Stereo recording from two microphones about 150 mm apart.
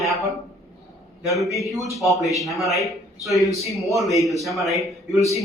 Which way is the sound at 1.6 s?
Centre (ahead or behind).